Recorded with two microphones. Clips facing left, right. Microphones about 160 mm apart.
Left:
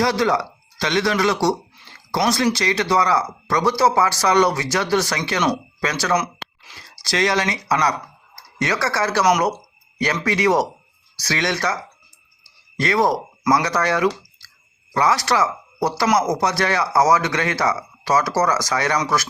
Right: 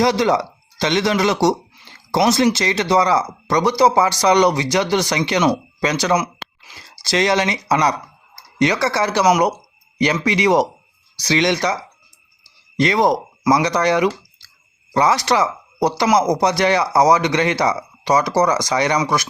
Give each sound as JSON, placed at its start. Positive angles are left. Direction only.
{"t": 0.0, "sound": "speech", "side_deg": -20}
{"t": 12.8, "sound": "speech", "side_deg": -20}